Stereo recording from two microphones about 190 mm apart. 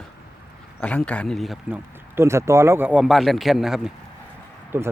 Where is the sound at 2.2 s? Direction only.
15° right (ahead or behind).